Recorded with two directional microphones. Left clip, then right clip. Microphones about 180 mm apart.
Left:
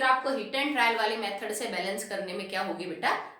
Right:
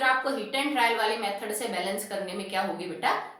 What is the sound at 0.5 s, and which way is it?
Speech, 25° left (ahead or behind).